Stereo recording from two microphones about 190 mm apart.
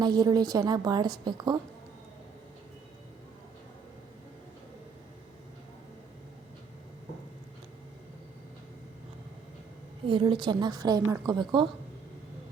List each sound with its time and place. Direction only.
0.0 s a woman's voice: 20° right (ahead or behind)
10.1 s a woman's voice: 25° right (ahead or behind)